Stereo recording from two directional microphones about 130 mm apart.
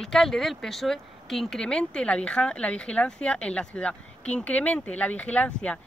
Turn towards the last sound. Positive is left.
turn(degrees=10)  # may be behind; listen again after turning